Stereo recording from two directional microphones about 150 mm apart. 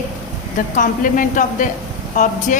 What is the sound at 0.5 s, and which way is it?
Speech, 65° left (ahead or behind).